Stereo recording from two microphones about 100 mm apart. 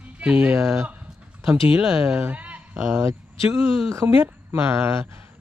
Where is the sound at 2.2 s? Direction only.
15° right (ahead or behind).